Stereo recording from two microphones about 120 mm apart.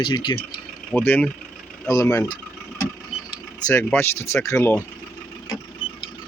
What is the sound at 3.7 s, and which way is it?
Speech, 20° left (ahead or behind).